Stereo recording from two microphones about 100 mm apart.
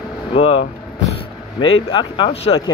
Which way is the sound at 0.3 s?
70° left (ahead or behind).